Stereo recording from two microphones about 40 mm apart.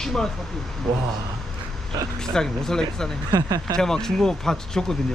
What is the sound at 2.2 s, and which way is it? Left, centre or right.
Speech, centre.